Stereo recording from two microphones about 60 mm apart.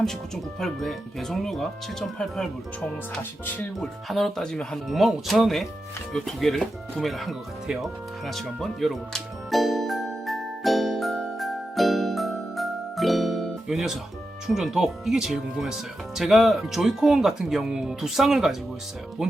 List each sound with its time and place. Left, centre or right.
0.6 s speech: centre
3.8 s speech: centre
8.4 s music: centre
13.7 s speech: centre